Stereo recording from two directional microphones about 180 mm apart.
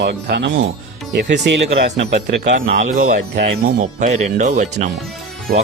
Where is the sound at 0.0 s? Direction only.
70° right (ahead or behind).